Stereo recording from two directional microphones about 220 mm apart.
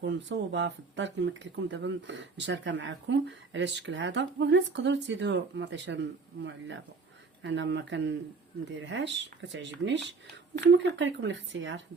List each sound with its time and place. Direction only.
0.0 s speech: 55° right (ahead or behind)